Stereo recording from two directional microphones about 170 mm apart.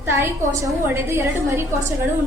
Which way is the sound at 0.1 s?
15° right (ahead or behind).